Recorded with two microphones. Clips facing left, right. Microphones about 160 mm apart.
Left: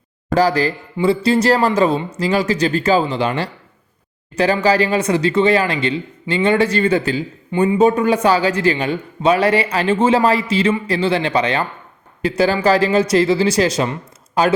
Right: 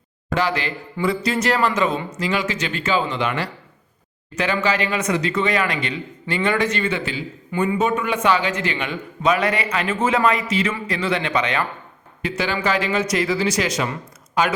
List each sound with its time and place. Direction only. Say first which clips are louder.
0.3 s a man's voice: left 7 dB; 40° left (ahead or behind)
7.5 s a man's voice: left 6 dB; 30° left (ahead or behind)